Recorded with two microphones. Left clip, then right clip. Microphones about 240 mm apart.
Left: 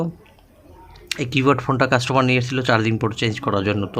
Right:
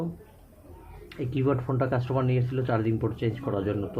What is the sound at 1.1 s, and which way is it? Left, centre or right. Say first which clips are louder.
Speech: left 10 dB; left.